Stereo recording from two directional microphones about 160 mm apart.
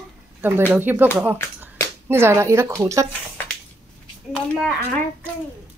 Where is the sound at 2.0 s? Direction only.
15° right (ahead or behind).